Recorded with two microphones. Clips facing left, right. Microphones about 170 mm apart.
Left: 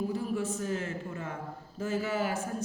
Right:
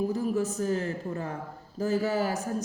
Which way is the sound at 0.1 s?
40° right (ahead or behind).